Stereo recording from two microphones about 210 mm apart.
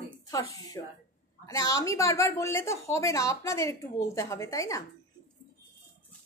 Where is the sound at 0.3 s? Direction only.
15° left (ahead or behind).